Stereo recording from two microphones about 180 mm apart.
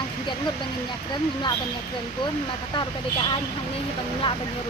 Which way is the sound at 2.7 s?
25° left (ahead or behind).